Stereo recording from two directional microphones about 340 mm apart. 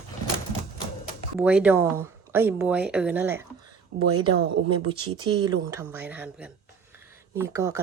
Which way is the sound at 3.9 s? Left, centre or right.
Centre.